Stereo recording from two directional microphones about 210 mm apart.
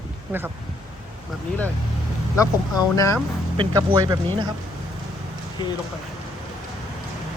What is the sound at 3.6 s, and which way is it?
Speech, 20° right (ahead or behind).